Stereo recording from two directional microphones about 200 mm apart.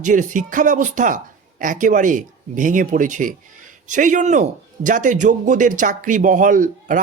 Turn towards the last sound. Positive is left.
turn(degrees=-40)  # may be behind; listen again after turning